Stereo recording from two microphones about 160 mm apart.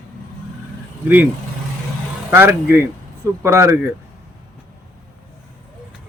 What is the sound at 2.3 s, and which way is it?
Speech, 15° right (ahead or behind).